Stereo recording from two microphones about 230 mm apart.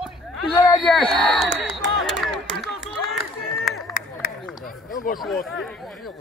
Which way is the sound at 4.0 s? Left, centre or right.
Left.